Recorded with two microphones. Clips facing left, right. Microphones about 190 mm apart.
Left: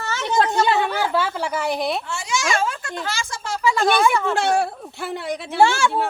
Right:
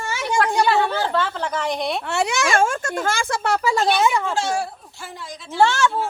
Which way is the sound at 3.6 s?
40° right (ahead or behind).